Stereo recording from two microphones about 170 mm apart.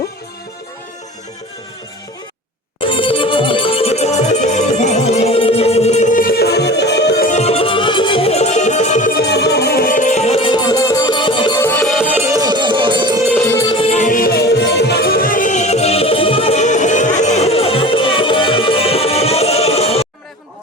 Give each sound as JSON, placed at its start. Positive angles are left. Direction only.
{"t": 2.8, "sound": "music", "side_deg": 30}
{"t": 7.3, "sound": "music", "side_deg": 40}
{"t": 9.1, "sound": "music", "side_deg": 80}
{"t": 11.6, "sound": "music", "side_deg": 10}
{"t": 11.9, "sound": "music", "side_deg": -5}
{"t": 13.5, "sound": "music", "side_deg": 20}
{"t": 13.7, "sound": "music", "side_deg": 40}